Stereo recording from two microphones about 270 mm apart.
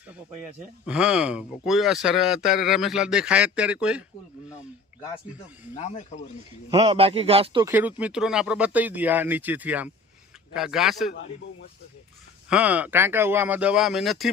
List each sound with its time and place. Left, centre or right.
0.9 s speech: centre
5.7 s speech: left
6.7 s a man's voice: right; by 11.1 s centre
12.5 s speech: centre